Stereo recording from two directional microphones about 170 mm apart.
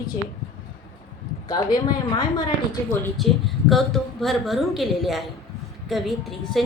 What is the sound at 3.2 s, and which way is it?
A woman's voice, centre (ahead or behind).